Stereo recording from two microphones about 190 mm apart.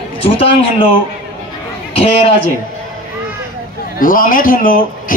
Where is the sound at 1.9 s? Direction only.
30° left (ahead or behind).